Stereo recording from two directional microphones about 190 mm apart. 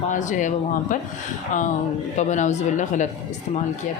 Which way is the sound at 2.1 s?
40° left (ahead or behind).